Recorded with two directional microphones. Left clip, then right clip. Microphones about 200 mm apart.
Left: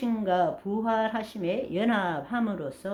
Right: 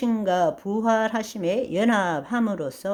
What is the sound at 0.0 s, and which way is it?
Speech, 45° right (ahead or behind).